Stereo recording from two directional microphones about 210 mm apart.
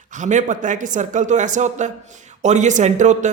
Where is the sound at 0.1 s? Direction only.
35° right (ahead or behind).